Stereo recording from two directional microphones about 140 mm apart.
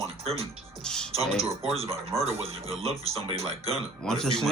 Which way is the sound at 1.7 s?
45° right (ahead or behind).